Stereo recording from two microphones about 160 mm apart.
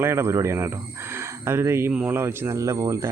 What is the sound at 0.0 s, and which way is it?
Speech, 15° right (ahead or behind).